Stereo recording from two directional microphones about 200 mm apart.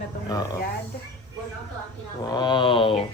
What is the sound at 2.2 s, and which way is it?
Speech, 20° left (ahead or behind).